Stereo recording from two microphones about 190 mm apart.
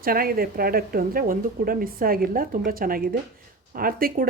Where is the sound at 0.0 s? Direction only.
50° right (ahead or behind).